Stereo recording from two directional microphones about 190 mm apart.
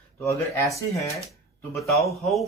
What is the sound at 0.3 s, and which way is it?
Speech, 15° left (ahead or behind).